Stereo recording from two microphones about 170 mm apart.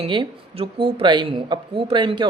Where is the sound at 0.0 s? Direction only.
30° right (ahead or behind).